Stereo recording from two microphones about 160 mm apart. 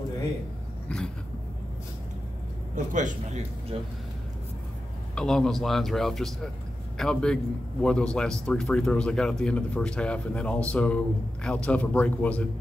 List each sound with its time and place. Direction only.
0.8 s dog: 5° left (ahead or behind)
2.7 s a man's voice: 55° right (ahead or behind)
3.7 s speech: 35° right (ahead or behind)
5.1 s a man's voice: 5° left (ahead or behind)